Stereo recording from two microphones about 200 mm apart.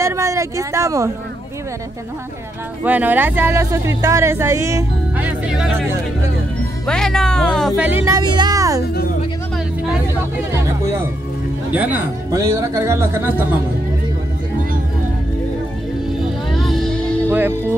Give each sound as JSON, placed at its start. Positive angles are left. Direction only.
{"t": 0.0, "sound": "speech", "side_deg": -15}
{"t": 2.8, "sound": "speech", "side_deg": -10}
{"t": 6.9, "sound": "speech", "side_deg": 0}
{"t": 11.7, "sound": "speech", "side_deg": -10}
{"t": 16.5, "sound": "music", "side_deg": 0}
{"t": 17.3, "sound": "music", "side_deg": -10}